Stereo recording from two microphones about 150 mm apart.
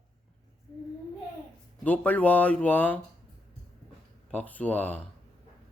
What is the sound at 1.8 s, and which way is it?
Speech, 10° left (ahead or behind).